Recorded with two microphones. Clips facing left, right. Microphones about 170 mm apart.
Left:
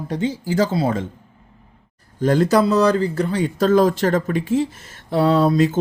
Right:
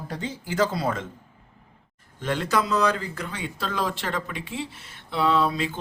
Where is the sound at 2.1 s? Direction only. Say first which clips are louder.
Left 9 dB; 40° left (ahead or behind).